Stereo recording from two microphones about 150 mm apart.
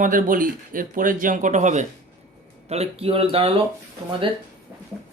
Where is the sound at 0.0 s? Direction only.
65° right (ahead or behind); by 3.6 s 40° right (ahead or behind).